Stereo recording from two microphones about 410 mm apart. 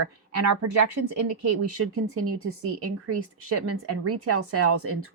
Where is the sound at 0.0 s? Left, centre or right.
Right.